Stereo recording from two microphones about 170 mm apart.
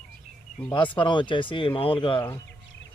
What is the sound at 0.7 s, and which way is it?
Speech, 30° left (ahead or behind).